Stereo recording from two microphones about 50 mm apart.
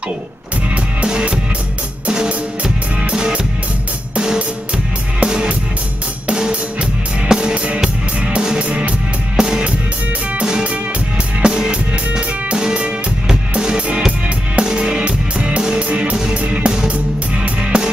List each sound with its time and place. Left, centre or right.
1.0 s music: centre
8.6 s music: right
9.4 s music: centre